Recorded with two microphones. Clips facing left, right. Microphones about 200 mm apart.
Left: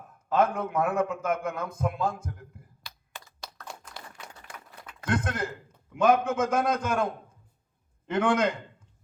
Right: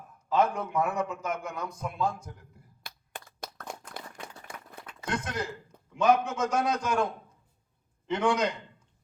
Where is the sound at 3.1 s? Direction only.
55° right (ahead or behind).